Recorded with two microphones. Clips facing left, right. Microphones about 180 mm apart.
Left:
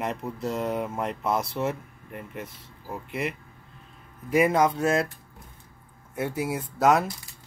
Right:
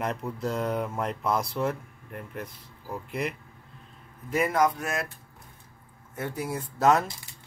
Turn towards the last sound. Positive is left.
turn(degrees=0)  # may be behind; listen again after turning